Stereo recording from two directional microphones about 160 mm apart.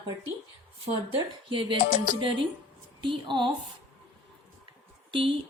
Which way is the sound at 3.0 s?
30° right (ahead or behind).